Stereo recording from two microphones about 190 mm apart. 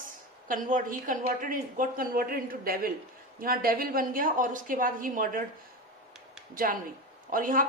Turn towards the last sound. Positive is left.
turn(degrees=-45)  # may be behind; listen again after turning